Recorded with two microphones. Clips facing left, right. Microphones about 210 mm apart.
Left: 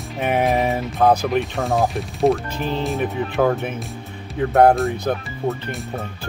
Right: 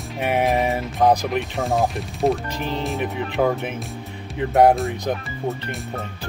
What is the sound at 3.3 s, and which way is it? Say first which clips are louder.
Speech: left 1 dB; 15° right (ahead or behind).